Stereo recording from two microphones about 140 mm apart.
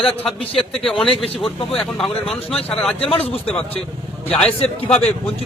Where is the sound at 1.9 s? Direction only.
Centre (ahead or behind).